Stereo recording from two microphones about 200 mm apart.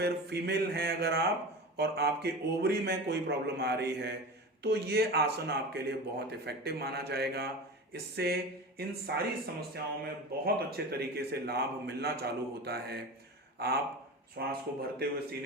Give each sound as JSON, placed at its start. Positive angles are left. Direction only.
{"t": 0.0, "sound": "a man's voice", "side_deg": -55}